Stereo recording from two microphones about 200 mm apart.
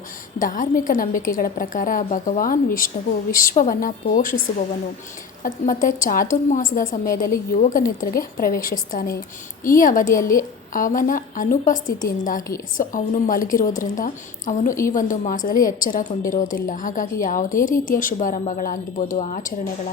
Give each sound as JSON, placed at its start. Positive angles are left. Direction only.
{"t": 0.3, "sound": "a woman's voice", "side_deg": 40}
{"t": 5.4, "sound": "a woman's voice", "side_deg": 40}
{"t": 10.1, "sound": "a woman's voice", "side_deg": 15}
{"t": 10.7, "sound": "a woman's voice", "side_deg": 40}